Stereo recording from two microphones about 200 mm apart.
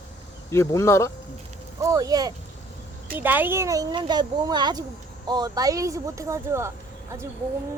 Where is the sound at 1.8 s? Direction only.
15° right (ahead or behind).